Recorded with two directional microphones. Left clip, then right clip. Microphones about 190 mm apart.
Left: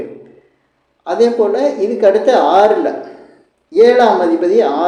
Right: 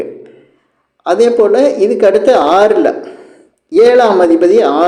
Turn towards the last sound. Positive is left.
turn(degrees=-45)  # may be behind; listen again after turning